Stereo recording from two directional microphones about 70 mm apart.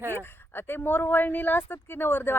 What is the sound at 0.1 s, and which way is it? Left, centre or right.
Speech, left.